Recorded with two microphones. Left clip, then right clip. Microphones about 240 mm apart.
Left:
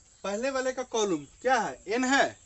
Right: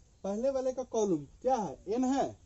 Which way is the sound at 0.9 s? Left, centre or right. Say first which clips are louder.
Left 2 dB; left.